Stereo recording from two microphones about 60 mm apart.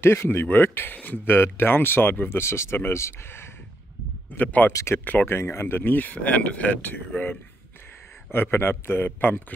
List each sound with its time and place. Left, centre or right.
0.0 s speech: left
0.9 s speech: left
1.2 s speech: left
4.3 s speech: left
5.3 s speech: left
8.3 s speech: left